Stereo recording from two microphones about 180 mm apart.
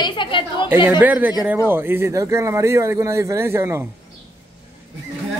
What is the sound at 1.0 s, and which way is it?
Speech, 10° right (ahead or behind).